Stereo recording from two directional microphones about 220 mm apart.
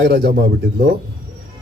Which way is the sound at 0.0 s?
45° right (ahead or behind).